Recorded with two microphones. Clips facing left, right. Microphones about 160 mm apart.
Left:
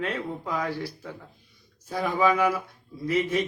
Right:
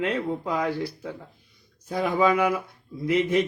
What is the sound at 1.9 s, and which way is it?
A man's voice, 20° right (ahead or behind).